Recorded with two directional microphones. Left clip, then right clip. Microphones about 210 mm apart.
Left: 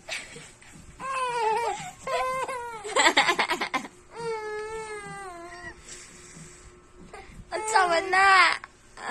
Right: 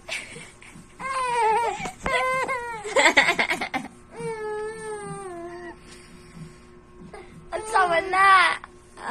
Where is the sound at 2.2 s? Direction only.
15° left (ahead or behind).